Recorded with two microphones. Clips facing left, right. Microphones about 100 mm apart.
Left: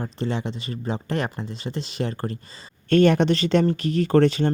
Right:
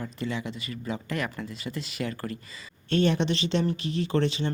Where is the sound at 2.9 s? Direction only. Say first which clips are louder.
Left 7 dB; 55° left (ahead or behind).